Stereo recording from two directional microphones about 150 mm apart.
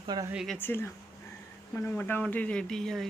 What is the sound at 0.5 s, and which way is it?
A woman's voice, 15° left (ahead or behind).